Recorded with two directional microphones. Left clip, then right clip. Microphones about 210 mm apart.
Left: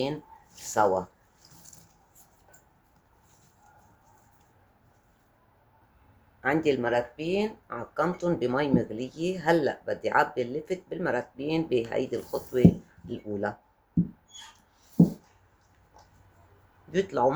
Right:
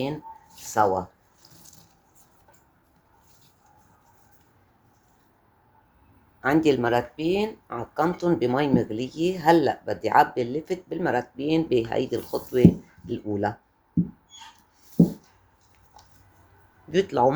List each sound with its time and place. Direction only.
0.6 s speech: 15° right (ahead or behind)
6.4 s speech: 25° right (ahead or behind)
16.9 s speech: 25° right (ahead or behind)